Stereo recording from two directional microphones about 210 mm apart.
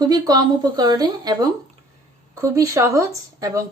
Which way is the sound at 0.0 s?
20° right (ahead or behind).